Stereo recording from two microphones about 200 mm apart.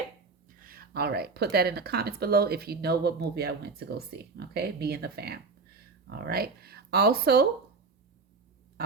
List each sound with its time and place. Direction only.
0.6 s speech: 45° right (ahead or behind)